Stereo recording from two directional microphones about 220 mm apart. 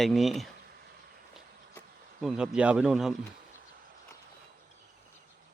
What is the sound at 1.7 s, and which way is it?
Speech, centre (ahead or behind).